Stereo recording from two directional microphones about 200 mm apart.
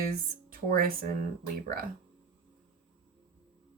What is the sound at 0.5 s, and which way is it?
Speech, 45° right (ahead or behind).